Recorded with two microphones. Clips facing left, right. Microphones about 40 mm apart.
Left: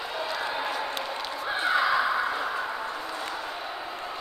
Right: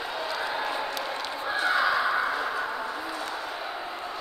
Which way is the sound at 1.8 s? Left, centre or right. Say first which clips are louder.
Left 2 dB; centre.